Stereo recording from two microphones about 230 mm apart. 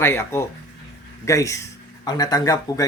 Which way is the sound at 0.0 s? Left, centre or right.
Centre.